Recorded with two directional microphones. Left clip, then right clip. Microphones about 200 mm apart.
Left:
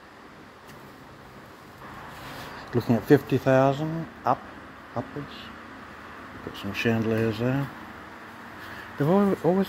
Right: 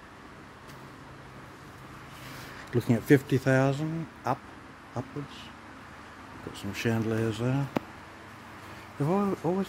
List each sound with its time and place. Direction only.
2.7 s speech: 25° right (ahead or behind)
6.5 s speech: 25° right (ahead or behind)
9.0 s speech: 5° right (ahead or behind)